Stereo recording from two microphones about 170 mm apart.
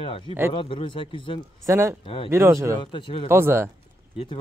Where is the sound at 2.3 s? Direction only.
15° right (ahead or behind).